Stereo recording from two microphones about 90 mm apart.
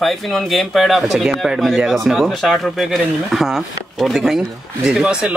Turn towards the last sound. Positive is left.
turn(degrees=-10)  # may be behind; listen again after turning